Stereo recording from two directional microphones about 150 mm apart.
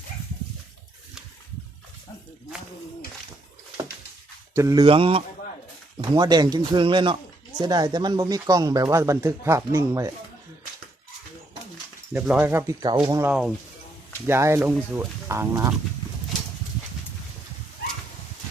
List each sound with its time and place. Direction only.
4.5 s speech: 25° right (ahead or behind); by 5.2 s 40° right (ahead or behind)
6.0 s speech: 30° right (ahead or behind)
12.1 s speech: 5° right (ahead or behind)
12.8 s speech: 25° right (ahead or behind)